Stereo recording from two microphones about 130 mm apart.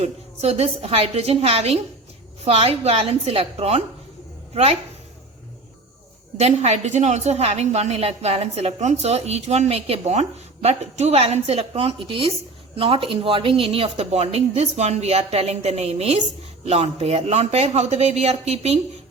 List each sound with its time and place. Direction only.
0.0 s speech: 55° right (ahead or behind)
6.4 s a woman's voice: 60° right (ahead or behind)